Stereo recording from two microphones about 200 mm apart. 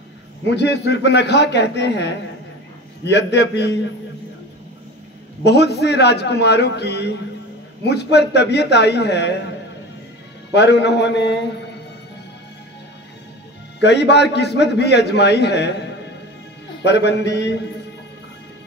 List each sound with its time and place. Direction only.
0.5 s a man's voice: 60° left (ahead or behind)
5.4 s a man's voice: 55° left (ahead or behind)
10.5 s a man's voice: 55° left (ahead or behind)
13.7 s a man's voice: 55° left (ahead or behind)
16.8 s a man's voice: 60° left (ahead or behind)